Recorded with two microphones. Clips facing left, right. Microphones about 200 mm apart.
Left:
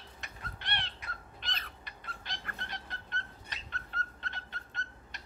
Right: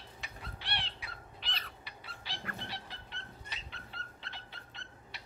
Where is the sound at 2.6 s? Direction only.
10° right (ahead or behind).